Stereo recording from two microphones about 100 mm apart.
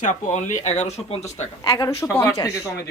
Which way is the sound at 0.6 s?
90° left.